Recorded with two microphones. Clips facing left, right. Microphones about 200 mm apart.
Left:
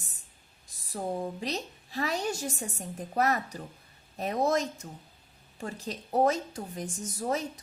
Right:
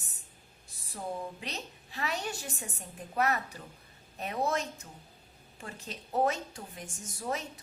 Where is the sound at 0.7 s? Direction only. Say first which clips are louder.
Left 5 dB; 40° left (ahead or behind).